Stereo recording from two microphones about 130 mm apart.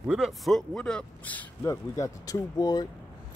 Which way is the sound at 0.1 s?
Centre (ahead or behind).